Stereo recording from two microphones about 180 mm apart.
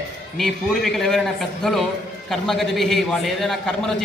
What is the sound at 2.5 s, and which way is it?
A man's voice, centre (ahead or behind).